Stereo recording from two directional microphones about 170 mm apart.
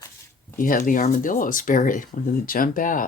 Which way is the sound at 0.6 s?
55° left (ahead or behind).